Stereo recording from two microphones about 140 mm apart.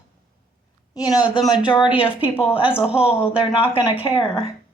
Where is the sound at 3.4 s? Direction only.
35° left (ahead or behind).